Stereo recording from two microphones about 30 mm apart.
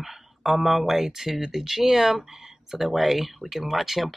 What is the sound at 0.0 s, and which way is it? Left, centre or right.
Speech, centre.